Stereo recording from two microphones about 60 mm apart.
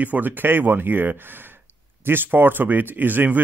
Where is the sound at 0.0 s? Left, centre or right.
Right.